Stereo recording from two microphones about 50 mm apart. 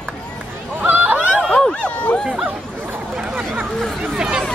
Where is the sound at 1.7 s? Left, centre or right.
Left.